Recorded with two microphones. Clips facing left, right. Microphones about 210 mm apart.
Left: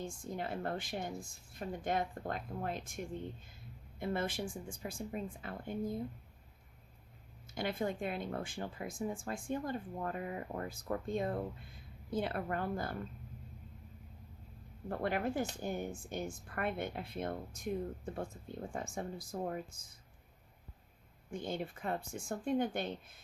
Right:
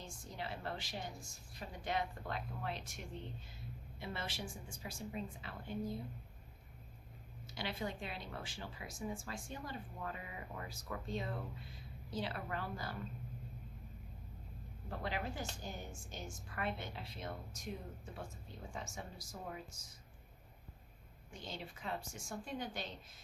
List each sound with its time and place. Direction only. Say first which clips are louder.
0.0 s speech: left 7 dB; 50° left (ahead or behind)
7.5 s speech: left 6 dB; 50° left (ahead or behind)
14.8 s speech: left 7 dB; 55° left (ahead or behind)
21.2 s speech: left 9 dB; 55° left (ahead or behind)